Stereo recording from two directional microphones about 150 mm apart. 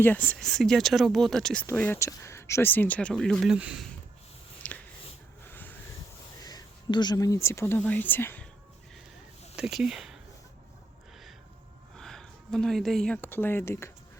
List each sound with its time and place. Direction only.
0.0 s speech: 10° left (ahead or behind); by 3.8 s 5° right (ahead or behind)
4.6 s a sound: 10° left (ahead or behind)
6.4 s speech: 25° left (ahead or behind)
9.6 s speech: 5° right (ahead or behind)
11.9 s speech: 5° left (ahead or behind)